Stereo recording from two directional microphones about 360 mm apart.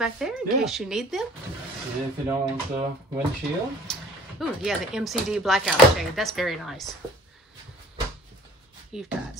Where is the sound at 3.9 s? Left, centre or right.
Centre.